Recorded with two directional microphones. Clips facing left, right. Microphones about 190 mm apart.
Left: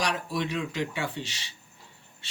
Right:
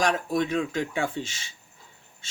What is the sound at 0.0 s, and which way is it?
Speech, 50° right (ahead or behind).